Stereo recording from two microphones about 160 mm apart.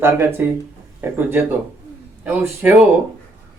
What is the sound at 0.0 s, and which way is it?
Speech, 15° right (ahead or behind).